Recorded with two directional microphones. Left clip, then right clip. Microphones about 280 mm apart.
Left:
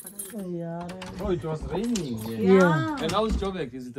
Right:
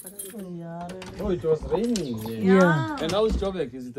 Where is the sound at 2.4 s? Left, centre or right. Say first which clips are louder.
Even; right.